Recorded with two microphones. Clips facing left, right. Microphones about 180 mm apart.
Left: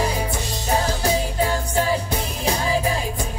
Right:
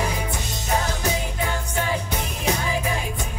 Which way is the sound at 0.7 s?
35° left (ahead or behind).